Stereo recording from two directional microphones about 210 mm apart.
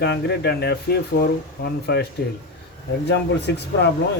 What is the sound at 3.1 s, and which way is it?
Speech, 55° left (ahead or behind).